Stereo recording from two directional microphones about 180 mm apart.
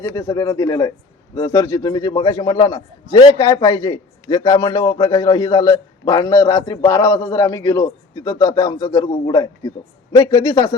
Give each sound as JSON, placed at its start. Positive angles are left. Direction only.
{"t": 0.0, "sound": "a man's voice", "side_deg": 15}